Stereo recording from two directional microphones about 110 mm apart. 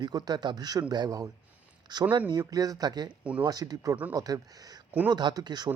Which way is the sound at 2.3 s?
35° right (ahead or behind).